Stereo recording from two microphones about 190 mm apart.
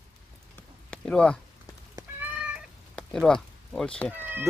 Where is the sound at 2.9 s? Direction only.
5° left (ahead or behind).